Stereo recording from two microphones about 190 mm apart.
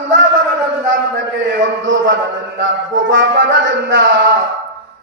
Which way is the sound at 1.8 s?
75° right (ahead or behind).